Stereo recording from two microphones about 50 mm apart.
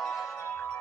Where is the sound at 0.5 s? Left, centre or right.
Left.